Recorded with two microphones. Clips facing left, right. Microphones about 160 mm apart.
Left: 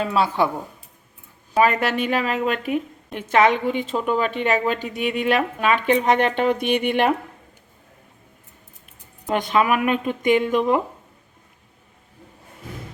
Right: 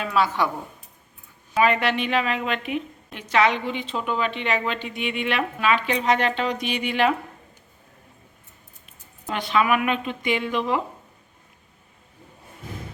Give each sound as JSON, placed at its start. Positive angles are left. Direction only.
{"t": 0.0, "sound": "a woman's voice", "side_deg": 30}
{"t": 1.5, "sound": "a woman's voice", "side_deg": 45}
{"t": 9.3, "sound": "a woman's voice", "side_deg": 45}